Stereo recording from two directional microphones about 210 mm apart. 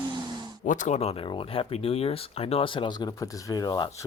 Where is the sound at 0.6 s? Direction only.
35° left (ahead or behind).